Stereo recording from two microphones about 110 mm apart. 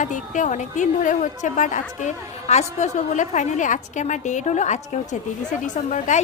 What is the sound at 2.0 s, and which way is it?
A woman's voice, 90° left.